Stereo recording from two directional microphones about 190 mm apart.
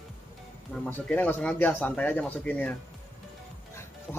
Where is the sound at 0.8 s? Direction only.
10° left (ahead or behind).